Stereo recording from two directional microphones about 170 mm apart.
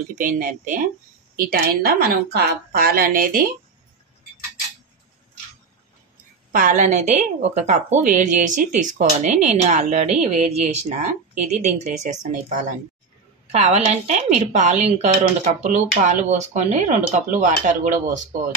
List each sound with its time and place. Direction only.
0.2 s a woman's voice: 50° right (ahead or behind)
6.5 s a woman's voice: 50° right (ahead or behind)